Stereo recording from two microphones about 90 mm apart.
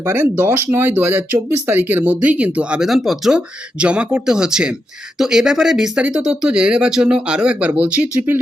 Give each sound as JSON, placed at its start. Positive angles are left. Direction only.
{"t": 0.0, "sound": "speech", "side_deg": -25}